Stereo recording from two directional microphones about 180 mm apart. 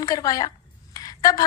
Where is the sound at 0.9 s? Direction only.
20° left (ahead or behind).